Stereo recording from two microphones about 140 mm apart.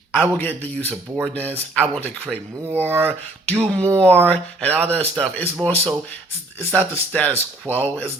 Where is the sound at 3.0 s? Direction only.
10° left (ahead or behind).